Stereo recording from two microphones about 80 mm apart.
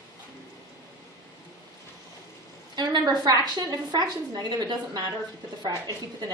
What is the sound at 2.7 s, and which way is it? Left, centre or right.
A woman's voice, right.